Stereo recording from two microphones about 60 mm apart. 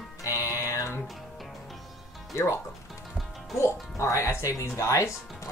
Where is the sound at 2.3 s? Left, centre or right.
Left.